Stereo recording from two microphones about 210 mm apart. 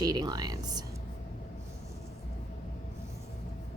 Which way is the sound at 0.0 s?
20° right (ahead or behind).